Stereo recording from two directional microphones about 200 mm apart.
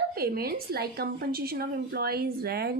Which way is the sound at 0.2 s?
50° right (ahead or behind).